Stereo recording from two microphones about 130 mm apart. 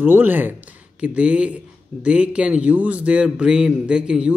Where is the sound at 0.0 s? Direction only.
15° right (ahead or behind).